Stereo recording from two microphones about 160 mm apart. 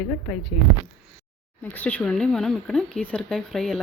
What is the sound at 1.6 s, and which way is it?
Speech, 10° left (ahead or behind).